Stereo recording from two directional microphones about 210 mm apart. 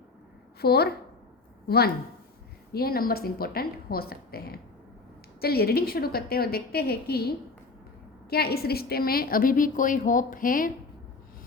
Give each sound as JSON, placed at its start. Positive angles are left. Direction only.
{"t": 0.6, "sound": "a woman's voice", "side_deg": 50}